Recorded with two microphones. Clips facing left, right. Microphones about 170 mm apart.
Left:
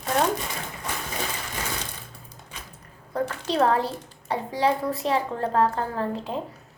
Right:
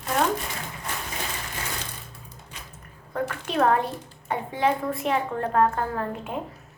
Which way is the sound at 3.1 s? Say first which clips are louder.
Left 1 dB; 30° left (ahead or behind).